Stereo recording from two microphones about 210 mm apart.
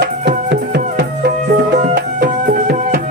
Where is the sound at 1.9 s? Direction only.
45° right (ahead or behind).